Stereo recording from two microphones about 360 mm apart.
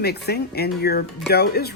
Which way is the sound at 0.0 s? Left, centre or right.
Left.